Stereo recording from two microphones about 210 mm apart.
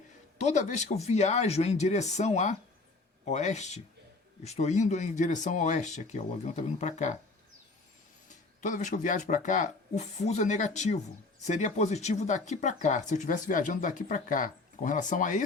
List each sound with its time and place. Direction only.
0.3 s speech: 35° left (ahead or behind)
8.3 s speech: 35° left (ahead or behind)